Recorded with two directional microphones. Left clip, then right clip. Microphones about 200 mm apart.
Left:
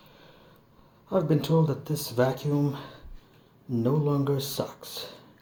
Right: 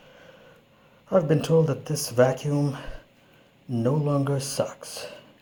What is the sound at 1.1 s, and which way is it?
Speech, 15° right (ahead or behind).